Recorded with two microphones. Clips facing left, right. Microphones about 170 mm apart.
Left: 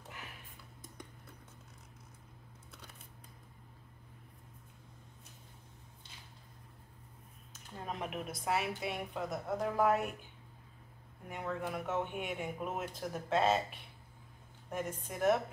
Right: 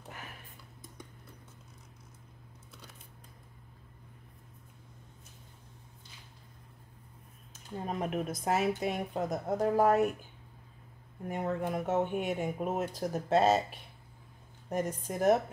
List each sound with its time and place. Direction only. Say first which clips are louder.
7.8 s speech: right 6 dB; 40° right (ahead or behind)
11.2 s speech: right 6 dB; 40° right (ahead or behind)